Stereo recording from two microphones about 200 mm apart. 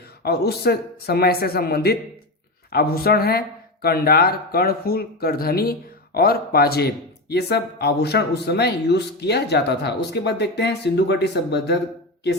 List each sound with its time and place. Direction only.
0.2 s speech: 50° left (ahead or behind)